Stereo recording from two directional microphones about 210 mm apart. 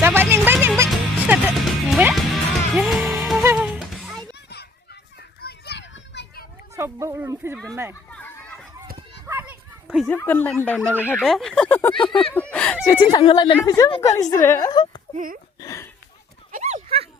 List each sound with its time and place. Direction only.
0.0 s music: 10° right (ahead or behind)
5.4 s children playing: 50° left (ahead or behind)
6.7 s speech: 15° right (ahead or behind)
8.1 s chatter: 5° left (ahead or behind)
9.2 s dog: 10° right (ahead or behind)
10.1 s speech: 10° left (ahead or behind)
11.9 s a sound: 25° left (ahead or behind)
12.3 s speech: 5° left (ahead or behind); by 15.0 s 20° left (ahead or behind)
15.1 s speech: 40° right (ahead or behind)
15.6 s speech: 15° left (ahead or behind)
16.5 s dog: 35° right (ahead or behind)